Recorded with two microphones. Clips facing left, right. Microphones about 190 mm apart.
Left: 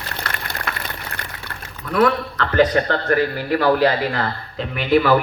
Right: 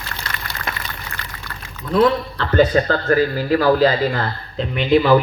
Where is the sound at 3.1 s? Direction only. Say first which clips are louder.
Right 3 dB; 35° right (ahead or behind).